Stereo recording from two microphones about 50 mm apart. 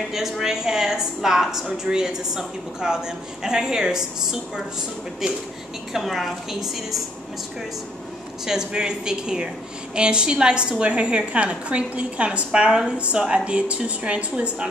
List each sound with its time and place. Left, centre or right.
0.1 s a woman's voice: centre
8.5 s a woman's voice: centre